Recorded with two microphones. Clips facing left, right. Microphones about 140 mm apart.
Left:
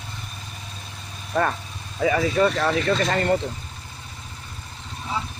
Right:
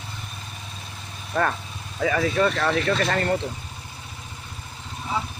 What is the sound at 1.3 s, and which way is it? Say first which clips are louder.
Speech: left 1 dB; 15° left (ahead or behind).